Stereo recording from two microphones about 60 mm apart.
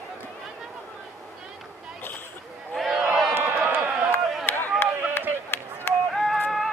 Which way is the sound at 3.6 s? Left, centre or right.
Right.